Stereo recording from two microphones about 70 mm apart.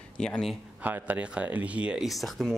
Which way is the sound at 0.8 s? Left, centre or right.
Right.